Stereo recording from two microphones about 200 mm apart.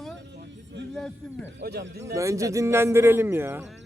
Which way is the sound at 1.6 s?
55° right (ahead or behind).